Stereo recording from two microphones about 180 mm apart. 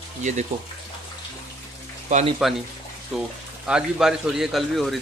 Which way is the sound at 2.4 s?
Centre (ahead or behind).